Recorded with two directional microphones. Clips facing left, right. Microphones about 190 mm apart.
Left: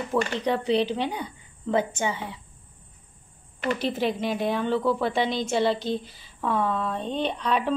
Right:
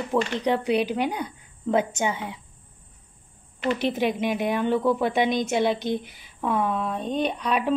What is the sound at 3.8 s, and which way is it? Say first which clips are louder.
A woman's voice: right 2 dB; 15° right (ahead or behind).